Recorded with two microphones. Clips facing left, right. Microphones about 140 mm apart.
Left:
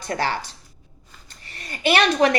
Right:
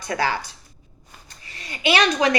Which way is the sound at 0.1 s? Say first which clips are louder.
Right 1 dB; 35° left (ahead or behind).